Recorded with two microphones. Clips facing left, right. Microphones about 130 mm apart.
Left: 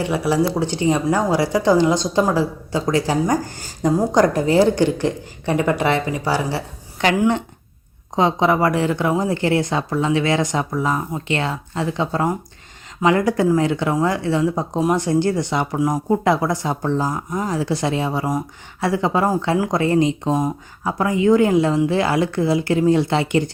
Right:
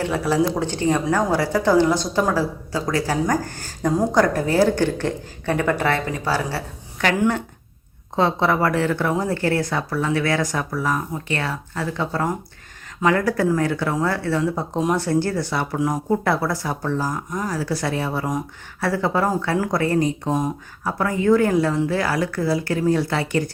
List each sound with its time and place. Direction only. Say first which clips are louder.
0.0 s a woman's voice: left 1 dB; 10° left (ahead or behind)